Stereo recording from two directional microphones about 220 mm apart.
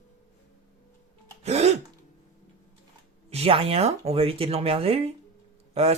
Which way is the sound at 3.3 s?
25° right (ahead or behind).